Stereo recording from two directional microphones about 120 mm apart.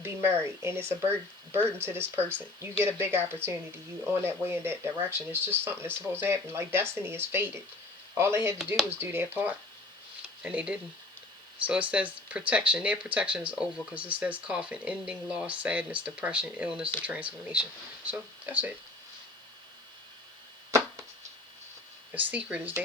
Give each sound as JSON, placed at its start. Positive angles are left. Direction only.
{"t": 0.0, "sound": "speech", "side_deg": -20}
{"t": 8.5, "sound": "speech", "side_deg": 0}
{"t": 8.9, "sound": "speech", "side_deg": -20}
{"t": 20.7, "sound": "arrow", "side_deg": -25}
{"t": 22.1, "sound": "speech", "side_deg": -15}